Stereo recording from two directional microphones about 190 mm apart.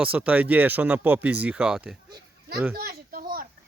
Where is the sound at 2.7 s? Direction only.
55° right (ahead or behind).